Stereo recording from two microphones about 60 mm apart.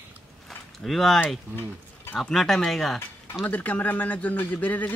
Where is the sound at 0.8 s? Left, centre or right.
Centre.